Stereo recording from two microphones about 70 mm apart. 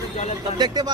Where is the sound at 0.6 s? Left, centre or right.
Right.